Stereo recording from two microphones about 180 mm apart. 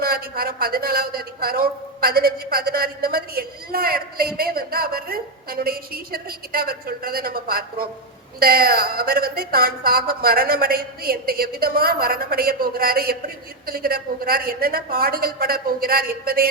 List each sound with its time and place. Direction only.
0.0 s a woman's voice: 55° right (ahead or behind)